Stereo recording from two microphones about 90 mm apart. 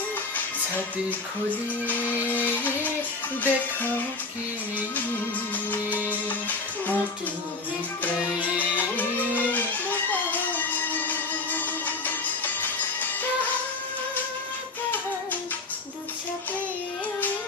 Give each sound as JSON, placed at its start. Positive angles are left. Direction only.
{"t": 1.9, "sound": "music", "side_deg": 20}
{"t": 6.2, "sound": "music", "side_deg": 20}
{"t": 8.7, "sound": "music", "side_deg": 20}